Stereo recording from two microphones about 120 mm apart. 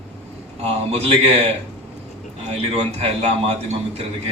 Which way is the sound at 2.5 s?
60° right (ahead or behind).